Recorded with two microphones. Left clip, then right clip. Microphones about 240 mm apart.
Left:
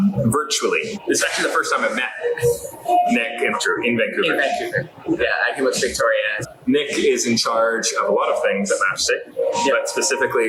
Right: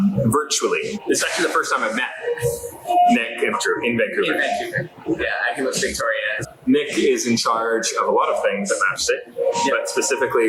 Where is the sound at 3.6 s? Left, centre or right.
Centre.